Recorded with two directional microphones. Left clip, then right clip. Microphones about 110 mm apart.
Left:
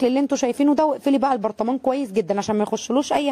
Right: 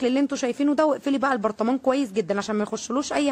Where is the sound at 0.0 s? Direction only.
30° left (ahead or behind).